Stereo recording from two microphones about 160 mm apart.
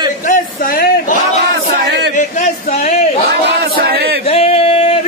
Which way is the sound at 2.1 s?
50° left (ahead or behind).